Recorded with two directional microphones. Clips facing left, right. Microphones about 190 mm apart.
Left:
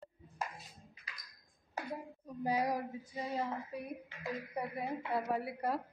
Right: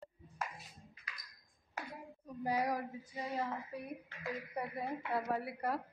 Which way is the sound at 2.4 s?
20° left (ahead or behind).